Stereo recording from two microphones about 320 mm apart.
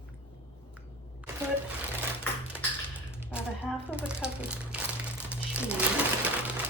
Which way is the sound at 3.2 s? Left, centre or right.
Centre.